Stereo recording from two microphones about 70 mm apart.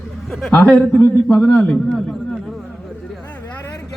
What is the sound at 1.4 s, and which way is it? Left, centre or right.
Speech, centre.